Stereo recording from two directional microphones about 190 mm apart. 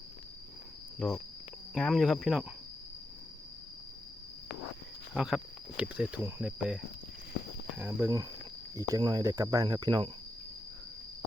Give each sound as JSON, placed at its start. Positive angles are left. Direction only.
{"t": 1.0, "sound": "speech", "side_deg": 5}
{"t": 5.1, "sound": "speech", "side_deg": -5}
{"t": 7.8, "sound": "speech", "side_deg": -10}
{"t": 8.7, "sound": "cricket", "side_deg": -20}